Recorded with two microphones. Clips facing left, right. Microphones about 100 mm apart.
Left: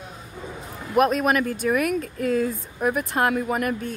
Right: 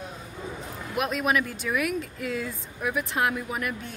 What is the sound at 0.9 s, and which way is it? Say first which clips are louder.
Speech: left 6 dB; 45° left (ahead or behind).